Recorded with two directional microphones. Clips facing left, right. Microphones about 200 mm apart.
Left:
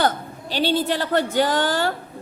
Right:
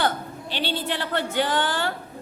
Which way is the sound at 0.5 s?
40° left (ahead or behind).